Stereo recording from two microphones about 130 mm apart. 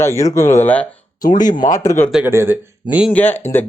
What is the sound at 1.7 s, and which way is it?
Speech, 25° left (ahead or behind).